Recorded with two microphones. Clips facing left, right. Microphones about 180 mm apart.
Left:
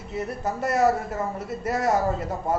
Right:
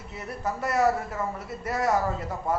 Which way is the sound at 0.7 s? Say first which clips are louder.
Left 2 dB; 20° left (ahead or behind).